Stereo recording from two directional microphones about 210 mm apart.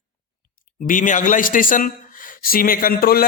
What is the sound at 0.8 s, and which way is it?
Speech, 40° left (ahead or behind).